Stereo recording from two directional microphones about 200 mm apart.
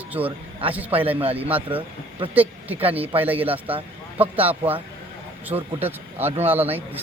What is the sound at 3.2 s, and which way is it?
Speech, 10° right (ahead or behind).